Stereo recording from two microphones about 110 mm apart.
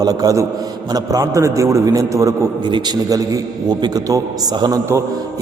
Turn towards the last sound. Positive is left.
turn(degrees=-35)  # may be behind; listen again after turning